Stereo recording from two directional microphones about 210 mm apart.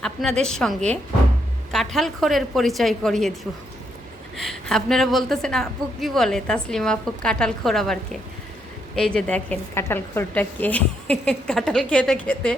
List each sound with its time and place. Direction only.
0.0 s a woman's voice: 5° left (ahead or behind)
4.4 s a woman's voice: centre (ahead or behind)